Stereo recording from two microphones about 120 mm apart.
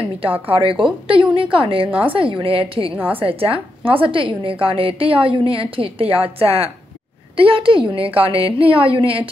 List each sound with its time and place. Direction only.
0.5 s a woman's voice: 50° right (ahead or behind)
1.9 s a woman's voice: 15° right (ahead or behind)
2.1 s a woman's voice: 45° right (ahead or behind)